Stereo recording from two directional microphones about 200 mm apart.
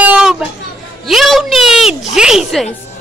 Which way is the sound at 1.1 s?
Centre (ahead or behind).